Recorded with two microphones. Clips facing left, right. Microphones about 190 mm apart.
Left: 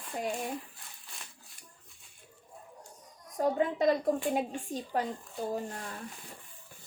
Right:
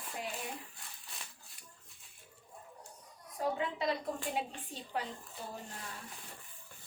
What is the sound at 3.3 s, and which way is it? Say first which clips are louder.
A woman's voice: left 7 dB; 45° left (ahead or behind).